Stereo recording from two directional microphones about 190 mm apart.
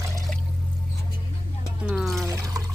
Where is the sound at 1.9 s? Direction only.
Centre (ahead or behind).